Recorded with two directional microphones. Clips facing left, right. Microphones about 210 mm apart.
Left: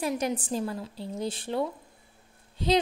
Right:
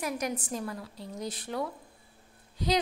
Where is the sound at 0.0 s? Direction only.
30° left (ahead or behind).